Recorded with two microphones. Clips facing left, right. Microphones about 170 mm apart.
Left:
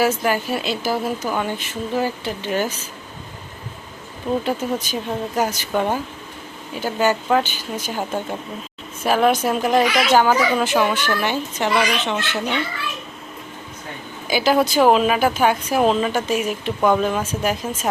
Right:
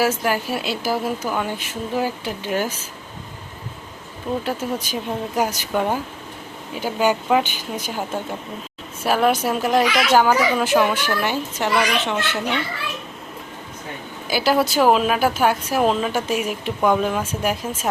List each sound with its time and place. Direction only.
0.0 s speech: 5° right (ahead or behind)
4.4 s speech: 10° right (ahead or behind)
9.0 s speech: 5° right (ahead or behind)
14.3 s speech: 5° right (ahead or behind)